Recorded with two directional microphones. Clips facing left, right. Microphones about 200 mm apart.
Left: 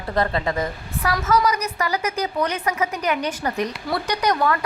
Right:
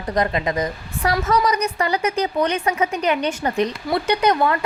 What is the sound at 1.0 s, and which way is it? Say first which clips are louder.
A woman's voice: right 1 dB; 30° right (ahead or behind).